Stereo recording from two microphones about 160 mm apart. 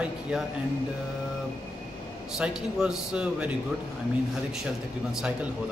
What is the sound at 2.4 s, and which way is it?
Speech, 5° right (ahead or behind).